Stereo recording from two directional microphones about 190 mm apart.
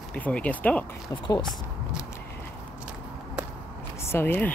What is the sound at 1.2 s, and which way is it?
Speech, 25° left (ahead or behind).